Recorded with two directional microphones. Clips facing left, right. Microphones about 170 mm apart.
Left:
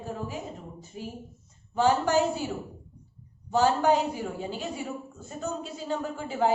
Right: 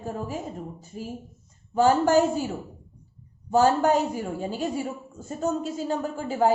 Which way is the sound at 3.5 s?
45° right (ahead or behind).